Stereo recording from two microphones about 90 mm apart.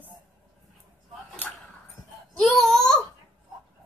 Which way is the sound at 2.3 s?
5° left (ahead or behind).